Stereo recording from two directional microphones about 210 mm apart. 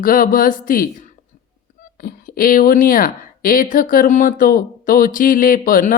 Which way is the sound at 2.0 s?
45° left (ahead or behind).